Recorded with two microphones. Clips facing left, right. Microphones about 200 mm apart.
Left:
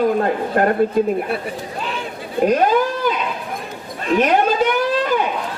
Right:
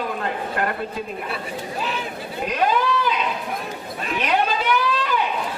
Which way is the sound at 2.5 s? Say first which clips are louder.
Left 3 dB; 45° left (ahead or behind).